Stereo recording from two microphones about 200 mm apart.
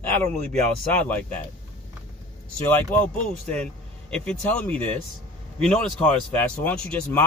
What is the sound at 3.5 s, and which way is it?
Speech, 5° left (ahead or behind).